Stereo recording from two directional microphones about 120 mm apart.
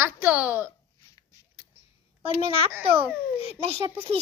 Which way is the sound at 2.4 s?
50° right (ahead or behind).